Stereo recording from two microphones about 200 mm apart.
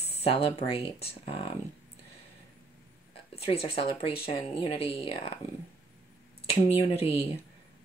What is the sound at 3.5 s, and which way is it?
Speech, 30° left (ahead or behind).